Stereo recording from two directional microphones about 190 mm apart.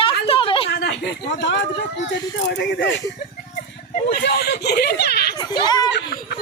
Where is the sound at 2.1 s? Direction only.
65° left (ahead or behind).